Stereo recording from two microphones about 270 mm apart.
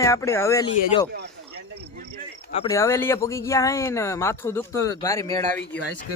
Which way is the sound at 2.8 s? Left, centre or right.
Centre.